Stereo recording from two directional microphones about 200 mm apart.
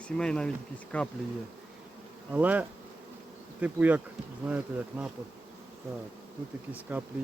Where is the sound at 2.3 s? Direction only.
10° right (ahead or behind).